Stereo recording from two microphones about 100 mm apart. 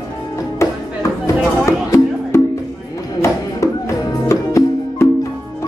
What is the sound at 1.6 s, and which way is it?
Music, 30° left (ahead or behind).